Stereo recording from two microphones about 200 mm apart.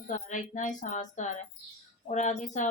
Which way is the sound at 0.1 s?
40° left (ahead or behind).